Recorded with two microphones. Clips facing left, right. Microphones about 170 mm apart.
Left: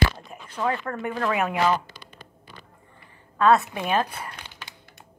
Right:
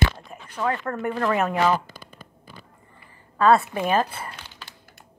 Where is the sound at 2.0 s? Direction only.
50° right (ahead or behind).